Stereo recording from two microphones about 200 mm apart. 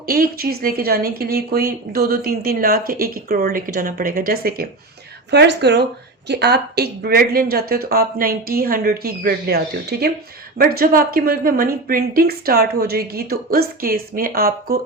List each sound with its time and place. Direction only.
0.0 s speech: 50° right (ahead or behind)
10.6 s speech: 50° right (ahead or behind)